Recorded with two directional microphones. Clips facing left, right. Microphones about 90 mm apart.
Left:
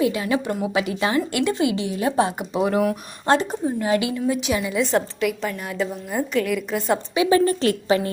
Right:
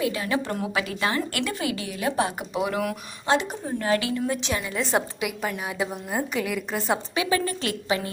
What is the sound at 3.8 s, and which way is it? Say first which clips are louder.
Speech: left 2 dB; 20° left (ahead or behind).